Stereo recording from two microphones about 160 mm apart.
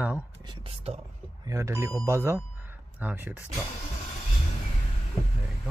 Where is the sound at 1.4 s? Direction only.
20° right (ahead or behind).